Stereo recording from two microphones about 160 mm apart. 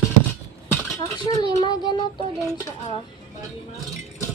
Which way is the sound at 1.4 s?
25° left (ahead or behind).